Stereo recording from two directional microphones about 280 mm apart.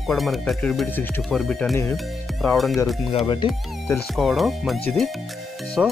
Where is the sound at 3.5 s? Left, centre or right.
Centre.